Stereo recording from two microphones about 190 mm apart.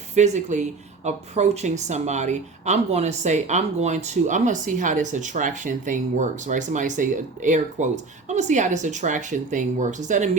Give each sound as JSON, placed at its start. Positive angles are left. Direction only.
{"t": 0.2, "sound": "speech", "side_deg": -40}